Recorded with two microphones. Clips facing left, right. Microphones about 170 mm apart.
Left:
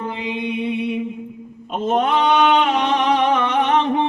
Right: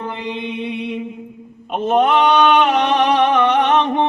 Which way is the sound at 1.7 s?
65° right (ahead or behind).